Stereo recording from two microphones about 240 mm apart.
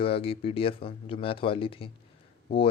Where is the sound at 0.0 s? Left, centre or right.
Left.